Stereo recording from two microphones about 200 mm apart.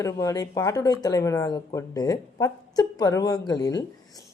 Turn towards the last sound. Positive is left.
turn(degrees=20)  # may be behind; listen again after turning